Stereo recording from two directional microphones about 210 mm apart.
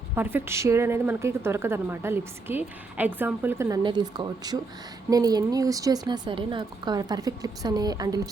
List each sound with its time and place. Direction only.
0.2 s a woman's voice: 10° right (ahead or behind)